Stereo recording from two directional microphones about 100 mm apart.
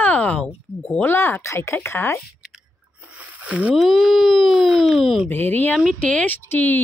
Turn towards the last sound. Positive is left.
turn(degrees=20)  # may be behind; listen again after turning